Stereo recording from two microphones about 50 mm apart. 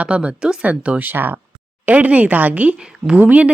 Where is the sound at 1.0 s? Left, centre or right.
Right.